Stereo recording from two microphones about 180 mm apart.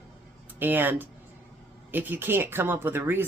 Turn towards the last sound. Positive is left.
turn(degrees=-10)  # may be behind; listen again after turning